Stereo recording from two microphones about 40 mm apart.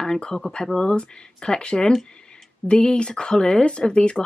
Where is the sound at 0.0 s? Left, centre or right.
Centre.